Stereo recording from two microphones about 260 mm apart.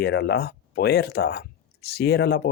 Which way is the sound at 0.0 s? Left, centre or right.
Left.